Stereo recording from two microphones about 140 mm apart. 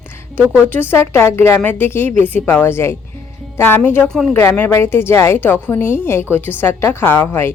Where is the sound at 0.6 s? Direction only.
15° left (ahead or behind).